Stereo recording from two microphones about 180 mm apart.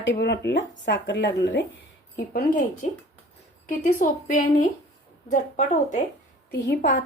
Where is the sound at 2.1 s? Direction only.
60° left (ahead or behind).